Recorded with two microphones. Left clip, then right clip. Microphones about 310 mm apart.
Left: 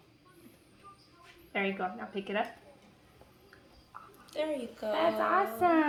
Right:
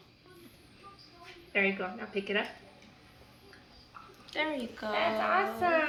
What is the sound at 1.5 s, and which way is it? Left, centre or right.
Speech, left.